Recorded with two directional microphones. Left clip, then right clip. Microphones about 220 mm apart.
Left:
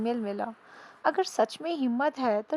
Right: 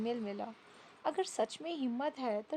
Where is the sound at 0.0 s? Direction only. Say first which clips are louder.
Left 8 dB; 25° left (ahead or behind).